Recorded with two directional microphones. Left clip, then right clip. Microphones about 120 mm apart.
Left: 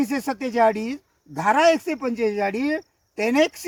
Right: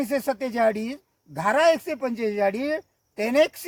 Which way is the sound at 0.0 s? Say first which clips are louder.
Even; 30° right (ahead or behind).